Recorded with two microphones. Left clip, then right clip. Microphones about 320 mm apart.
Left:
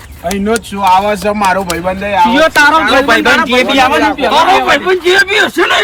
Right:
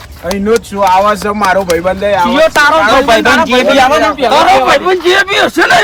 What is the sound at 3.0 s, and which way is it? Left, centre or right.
Speech, right.